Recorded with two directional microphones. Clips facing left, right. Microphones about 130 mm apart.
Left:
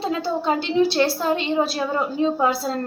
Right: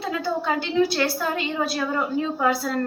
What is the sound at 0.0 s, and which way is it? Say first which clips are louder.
A woman's voice: left 2 dB; 25° left (ahead or behind).